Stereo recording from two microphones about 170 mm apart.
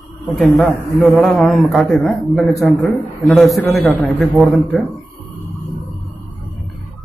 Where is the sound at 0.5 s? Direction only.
5° left (ahead or behind).